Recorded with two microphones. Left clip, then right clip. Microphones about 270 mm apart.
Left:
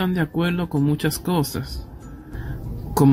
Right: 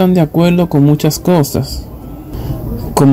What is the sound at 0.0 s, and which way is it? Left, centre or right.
Speech, centre.